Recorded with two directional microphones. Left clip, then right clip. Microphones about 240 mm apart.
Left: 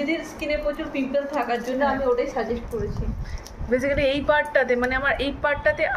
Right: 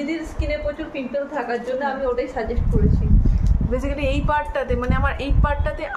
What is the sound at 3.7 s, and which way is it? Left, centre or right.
A woman's voice, centre.